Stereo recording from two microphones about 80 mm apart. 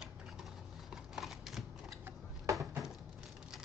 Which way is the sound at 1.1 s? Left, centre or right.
Centre.